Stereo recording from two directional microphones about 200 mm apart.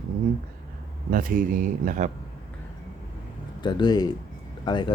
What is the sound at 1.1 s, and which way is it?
Speech, 45° right (ahead or behind).